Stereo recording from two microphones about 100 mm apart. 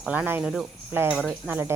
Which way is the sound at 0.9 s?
20° right (ahead or behind).